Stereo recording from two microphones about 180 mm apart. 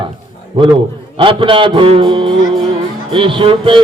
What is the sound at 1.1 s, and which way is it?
Music, 30° right (ahead or behind).